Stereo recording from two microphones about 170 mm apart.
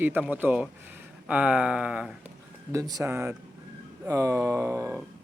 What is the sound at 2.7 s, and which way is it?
A man's voice, 20° right (ahead or behind).